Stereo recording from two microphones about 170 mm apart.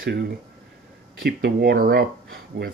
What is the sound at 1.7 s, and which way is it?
Speech, 55° right (ahead or behind).